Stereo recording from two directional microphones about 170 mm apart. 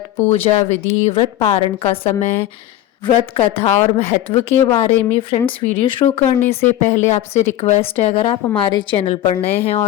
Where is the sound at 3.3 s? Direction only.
35° left (ahead or behind).